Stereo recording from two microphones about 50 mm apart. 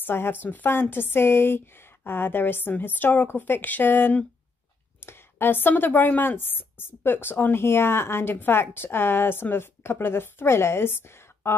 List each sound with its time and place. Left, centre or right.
0.0 s a woman's voice: left